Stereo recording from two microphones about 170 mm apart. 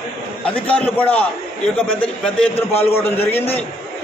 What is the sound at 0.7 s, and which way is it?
A man's voice, 10° left (ahead or behind).